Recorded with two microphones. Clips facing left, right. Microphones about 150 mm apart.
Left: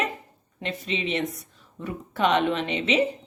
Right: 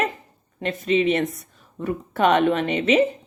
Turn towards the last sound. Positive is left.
turn(degrees=-50)  # may be behind; listen again after turning